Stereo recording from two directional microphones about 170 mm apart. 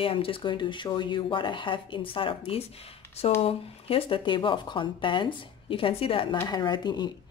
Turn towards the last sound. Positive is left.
turn(degrees=25)  # may be behind; listen again after turning